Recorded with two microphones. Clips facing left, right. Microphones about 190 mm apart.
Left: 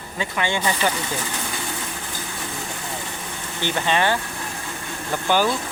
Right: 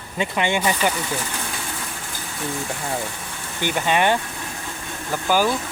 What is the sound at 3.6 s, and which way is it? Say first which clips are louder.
Speech: right 2 dB; 10° right (ahead or behind).